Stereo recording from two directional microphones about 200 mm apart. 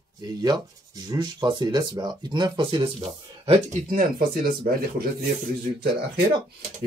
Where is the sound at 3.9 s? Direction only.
45° right (ahead or behind).